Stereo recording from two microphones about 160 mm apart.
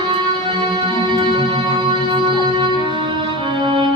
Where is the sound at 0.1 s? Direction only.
30° right (ahead or behind).